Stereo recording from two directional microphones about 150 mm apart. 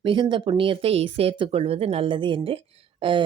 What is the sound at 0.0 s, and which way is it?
Speech, 35° right (ahead or behind).